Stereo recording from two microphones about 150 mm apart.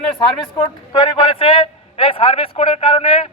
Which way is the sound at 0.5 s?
40° left (ahead or behind).